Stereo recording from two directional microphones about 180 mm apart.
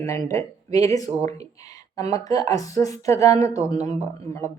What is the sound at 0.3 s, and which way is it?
Speech, 15° left (ahead or behind).